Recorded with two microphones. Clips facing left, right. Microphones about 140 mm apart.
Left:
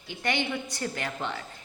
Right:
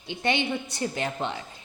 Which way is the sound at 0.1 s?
20° right (ahead or behind).